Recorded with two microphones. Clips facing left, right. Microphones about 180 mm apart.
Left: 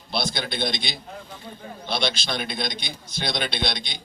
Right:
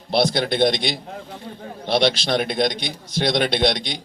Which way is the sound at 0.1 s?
75° right (ahead or behind).